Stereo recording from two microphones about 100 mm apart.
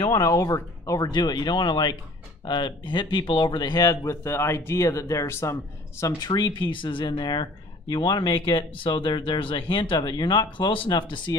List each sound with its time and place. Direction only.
0.2 s speech: 35° left (ahead or behind)
6.1 s speech: 45° left (ahead or behind)